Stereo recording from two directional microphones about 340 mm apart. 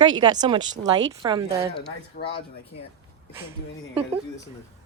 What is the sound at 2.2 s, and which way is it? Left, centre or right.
Speech, left.